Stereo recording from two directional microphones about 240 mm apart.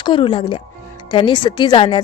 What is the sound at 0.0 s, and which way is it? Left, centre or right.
A woman's voice, centre.